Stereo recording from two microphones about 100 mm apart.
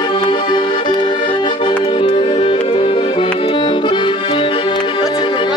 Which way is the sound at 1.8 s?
70° left (ahead or behind).